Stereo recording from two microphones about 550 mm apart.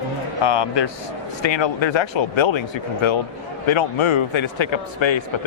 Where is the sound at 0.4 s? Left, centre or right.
Left.